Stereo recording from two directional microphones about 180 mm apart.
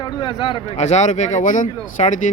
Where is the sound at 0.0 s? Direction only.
25° left (ahead or behind).